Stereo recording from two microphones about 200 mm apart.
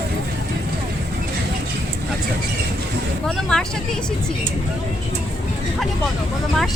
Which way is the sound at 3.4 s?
5° left (ahead or behind).